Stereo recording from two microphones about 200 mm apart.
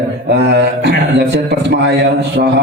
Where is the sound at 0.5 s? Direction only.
60° right (ahead or behind).